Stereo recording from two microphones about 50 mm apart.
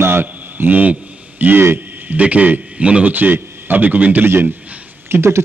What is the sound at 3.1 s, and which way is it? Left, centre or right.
Speech, right.